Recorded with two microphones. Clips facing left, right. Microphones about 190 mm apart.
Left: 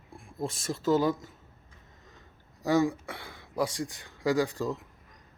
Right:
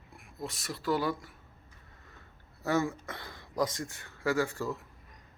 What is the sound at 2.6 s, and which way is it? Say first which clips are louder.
Speech: left 4 dB; 15° left (ahead or behind).